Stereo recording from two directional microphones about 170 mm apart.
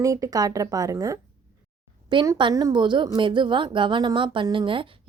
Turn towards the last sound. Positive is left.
turn(degrees=-30)  # may be behind; listen again after turning